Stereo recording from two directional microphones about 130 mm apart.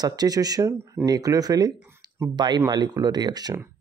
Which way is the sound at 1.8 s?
15° right (ahead or behind).